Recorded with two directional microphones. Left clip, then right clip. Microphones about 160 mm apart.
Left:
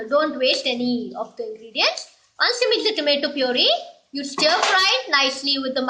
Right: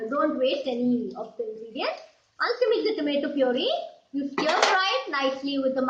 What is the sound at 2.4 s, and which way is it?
A woman's voice, 20° left (ahead or behind).